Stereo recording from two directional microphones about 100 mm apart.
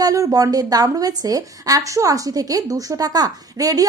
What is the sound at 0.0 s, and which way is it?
Speech, 35° right (ahead or behind).